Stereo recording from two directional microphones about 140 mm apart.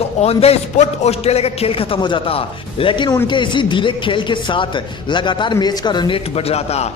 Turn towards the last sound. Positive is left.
turn(degrees=50)  # may be behind; listen again after turning